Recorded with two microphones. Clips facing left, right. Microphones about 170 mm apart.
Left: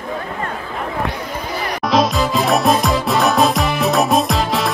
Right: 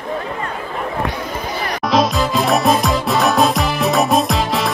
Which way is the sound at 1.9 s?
Centre (ahead or behind).